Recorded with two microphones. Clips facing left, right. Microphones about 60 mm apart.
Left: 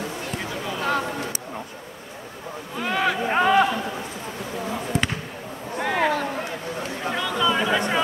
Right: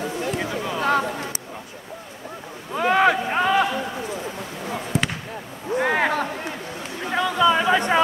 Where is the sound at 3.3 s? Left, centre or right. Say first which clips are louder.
Left 1 dB; centre.